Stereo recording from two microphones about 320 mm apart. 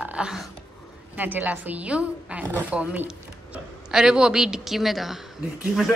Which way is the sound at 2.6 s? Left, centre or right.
Centre.